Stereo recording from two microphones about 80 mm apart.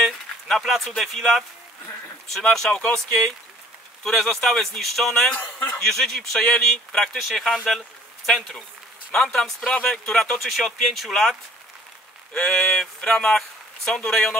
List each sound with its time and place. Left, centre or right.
0.0 s speech: centre
2.7 s speech: centre
4.0 s speech: centre
5.3 s speech: left
5.8 s speech: centre
12.4 s speech: centre